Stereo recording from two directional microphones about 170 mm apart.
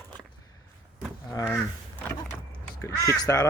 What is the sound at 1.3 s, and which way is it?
Speech, 20° left (ahead or behind).